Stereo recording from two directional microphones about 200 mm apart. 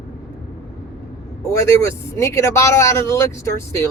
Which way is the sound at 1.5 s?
15° left (ahead or behind).